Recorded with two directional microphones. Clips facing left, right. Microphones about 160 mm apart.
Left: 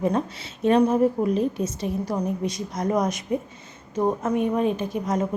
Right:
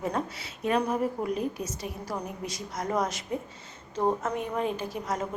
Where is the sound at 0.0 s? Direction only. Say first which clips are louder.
Left 7 dB; 25° left (ahead or behind).